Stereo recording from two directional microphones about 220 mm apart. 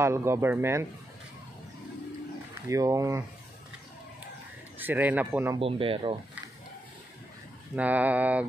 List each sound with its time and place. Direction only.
0.0 s speech: 10° right (ahead or behind)
2.7 s speech: 15° right (ahead or behind)
4.7 s speech: 10° right (ahead or behind)
5.6 s speech: 25° right (ahead or behind)
7.7 s speech: 5° right (ahead or behind)